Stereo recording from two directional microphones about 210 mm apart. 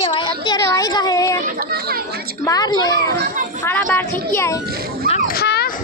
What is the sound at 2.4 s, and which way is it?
Speech, 15° left (ahead or behind).